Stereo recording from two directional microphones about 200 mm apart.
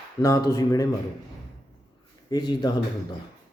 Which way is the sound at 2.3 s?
20° left (ahead or behind).